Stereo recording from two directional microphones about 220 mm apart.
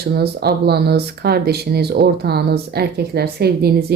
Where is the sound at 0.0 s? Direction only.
45° right (ahead or behind).